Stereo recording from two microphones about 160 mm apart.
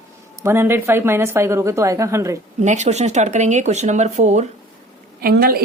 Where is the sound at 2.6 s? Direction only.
45° right (ahead or behind).